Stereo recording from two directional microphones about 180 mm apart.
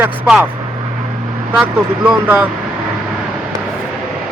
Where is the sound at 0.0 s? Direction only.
10° right (ahead or behind).